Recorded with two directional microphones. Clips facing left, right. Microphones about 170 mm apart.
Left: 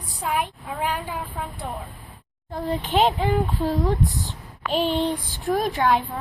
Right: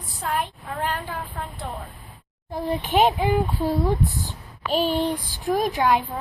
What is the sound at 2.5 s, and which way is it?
A woman's voice, 10° right (ahead or behind).